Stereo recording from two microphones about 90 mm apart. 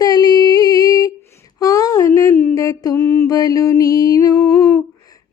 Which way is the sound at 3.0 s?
25° left (ahead or behind).